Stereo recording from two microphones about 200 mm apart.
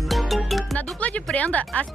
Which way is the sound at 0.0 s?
Centre (ahead or behind).